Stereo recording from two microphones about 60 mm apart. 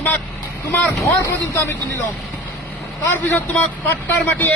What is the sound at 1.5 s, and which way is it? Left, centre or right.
Speech, left.